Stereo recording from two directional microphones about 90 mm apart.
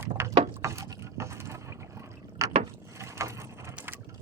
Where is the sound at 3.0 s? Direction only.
35° right (ahead or behind).